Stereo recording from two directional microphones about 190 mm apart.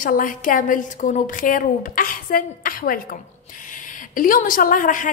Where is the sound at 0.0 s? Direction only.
45° left (ahead or behind).